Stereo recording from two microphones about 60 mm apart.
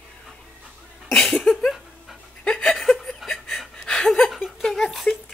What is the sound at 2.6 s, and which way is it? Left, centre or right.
Chuckle, centre.